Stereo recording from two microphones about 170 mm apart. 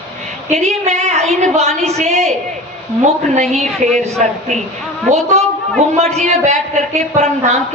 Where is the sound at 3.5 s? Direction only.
40° right (ahead or behind).